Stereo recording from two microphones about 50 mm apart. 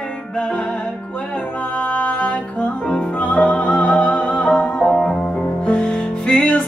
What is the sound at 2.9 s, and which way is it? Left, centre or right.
Music, left.